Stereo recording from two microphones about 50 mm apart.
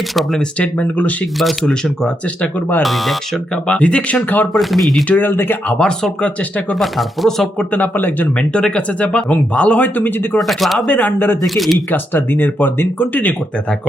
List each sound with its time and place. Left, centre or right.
0.6 s speech: left
2.4 s speech: left
2.8 s speech: centre
3.5 s speech: left
4.5 s speech: centre
5.0 s speech: left
5.8 s speech: centre
6.7 s speech: centre
7.7 s speech: left
8.5 s speech: centre; by 10.1 s left
10.3 s speech: centre
10.8 s speech: left
11.4 s speech: centre
11.9 s speech: left